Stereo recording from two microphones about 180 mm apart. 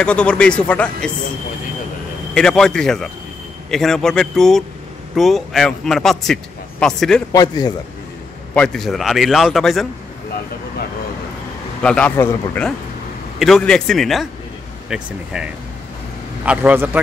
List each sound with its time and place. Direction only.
0.0 s a man's voice: 5° left (ahead or behind)
2.3 s a man's voice: 5° left (ahead or behind)
7.3 s a man's voice: 20° left (ahead or behind)
8.5 s a man's voice: 5° left (ahead or behind)
11.8 s a man's voice: 5° left (ahead or behind); by 17.0 s 10° right (ahead or behind)